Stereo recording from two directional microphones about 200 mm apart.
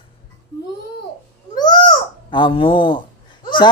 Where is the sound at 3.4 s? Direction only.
20° left (ahead or behind).